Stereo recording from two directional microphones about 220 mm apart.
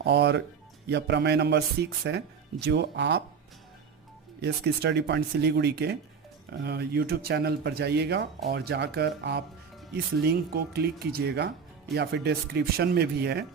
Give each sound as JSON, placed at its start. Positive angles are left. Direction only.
{"t": 0.0, "sound": "a man's voice", "side_deg": -50}
{"t": 4.4, "sound": "a man's voice", "side_deg": -50}